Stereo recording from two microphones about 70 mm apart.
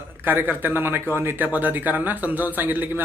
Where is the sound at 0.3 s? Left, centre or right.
Right.